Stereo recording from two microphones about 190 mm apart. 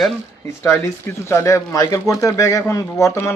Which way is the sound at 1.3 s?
15° left (ahead or behind).